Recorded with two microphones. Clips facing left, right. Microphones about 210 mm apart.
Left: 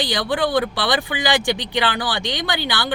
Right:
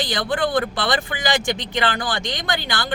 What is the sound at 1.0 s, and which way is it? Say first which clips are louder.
Speech: left 2 dB; 15° left (ahead or behind).